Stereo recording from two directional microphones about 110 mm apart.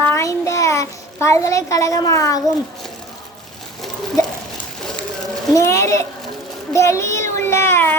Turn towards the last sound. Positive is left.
turn(degrees=20)  # may be behind; listen again after turning